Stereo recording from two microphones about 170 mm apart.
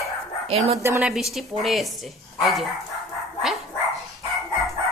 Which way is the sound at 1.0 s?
Centre (ahead or behind).